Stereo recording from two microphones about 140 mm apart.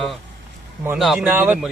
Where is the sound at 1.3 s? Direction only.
15° right (ahead or behind).